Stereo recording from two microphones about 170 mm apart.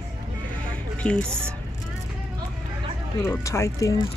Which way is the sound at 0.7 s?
5° left (ahead or behind).